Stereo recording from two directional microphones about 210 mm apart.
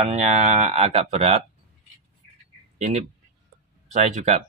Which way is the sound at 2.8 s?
35° right (ahead or behind).